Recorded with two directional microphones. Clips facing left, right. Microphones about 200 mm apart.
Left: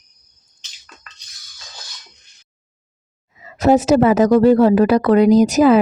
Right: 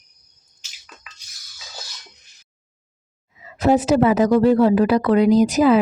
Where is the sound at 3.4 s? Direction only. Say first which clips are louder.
Left 2 dB; 45° left (ahead or behind).